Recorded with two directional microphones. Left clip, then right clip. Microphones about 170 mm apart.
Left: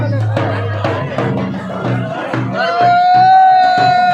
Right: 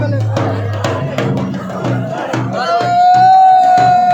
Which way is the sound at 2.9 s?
90° right.